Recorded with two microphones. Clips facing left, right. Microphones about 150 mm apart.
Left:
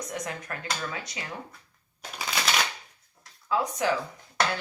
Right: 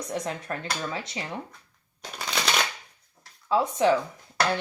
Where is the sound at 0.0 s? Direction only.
30° right (ahead or behind).